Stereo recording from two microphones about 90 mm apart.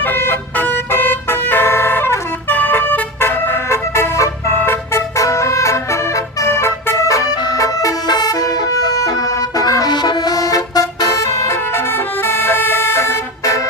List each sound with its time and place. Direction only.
0.0 s vehicle: 25° left (ahead or behind)
7.4 s vehicle: 40° left (ahead or behind)